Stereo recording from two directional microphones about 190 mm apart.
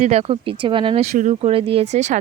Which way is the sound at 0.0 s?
30° right (ahead or behind).